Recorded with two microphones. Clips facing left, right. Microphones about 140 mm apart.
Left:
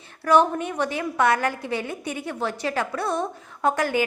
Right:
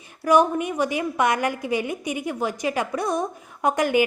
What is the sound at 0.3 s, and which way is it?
A woman's voice, 10° right (ahead or behind).